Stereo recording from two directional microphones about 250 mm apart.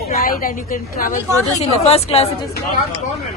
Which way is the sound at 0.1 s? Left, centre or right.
Left.